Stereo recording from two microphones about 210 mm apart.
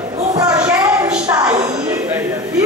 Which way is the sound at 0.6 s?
5° right (ahead or behind).